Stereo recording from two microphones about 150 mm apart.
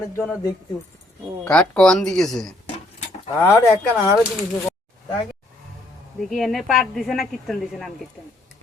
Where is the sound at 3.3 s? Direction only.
20° left (ahead or behind).